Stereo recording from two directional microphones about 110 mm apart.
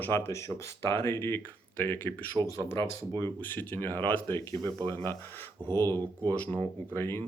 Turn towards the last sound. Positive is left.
turn(degrees=20)  # may be behind; listen again after turning